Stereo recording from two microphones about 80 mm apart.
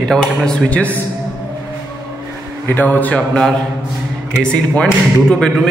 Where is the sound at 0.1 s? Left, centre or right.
Centre.